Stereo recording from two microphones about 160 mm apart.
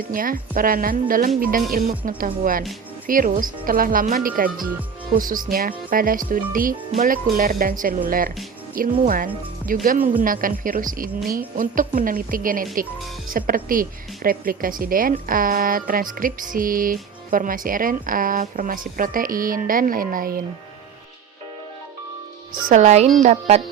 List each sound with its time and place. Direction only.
0.1 s speech: 60° right (ahead or behind)
22.7 s speech: 50° right (ahead or behind)